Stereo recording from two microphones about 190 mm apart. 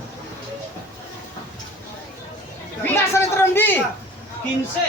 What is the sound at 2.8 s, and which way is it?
Chatter, 10° left (ahead or behind).